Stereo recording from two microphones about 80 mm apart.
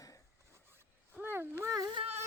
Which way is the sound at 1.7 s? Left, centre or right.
Right.